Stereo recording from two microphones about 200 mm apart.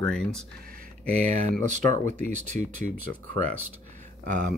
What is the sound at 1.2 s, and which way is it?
Speech, 35° right (ahead or behind).